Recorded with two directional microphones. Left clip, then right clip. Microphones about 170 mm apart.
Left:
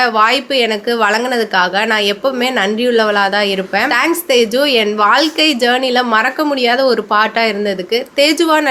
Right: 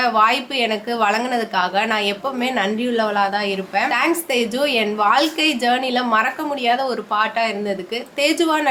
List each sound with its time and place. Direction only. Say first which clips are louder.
0.0 s a woman's voice: left 4 dB; 30° left (ahead or behind)